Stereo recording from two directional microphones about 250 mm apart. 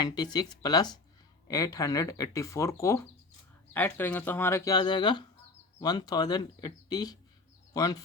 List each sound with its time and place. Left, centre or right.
0.0 s speech: centre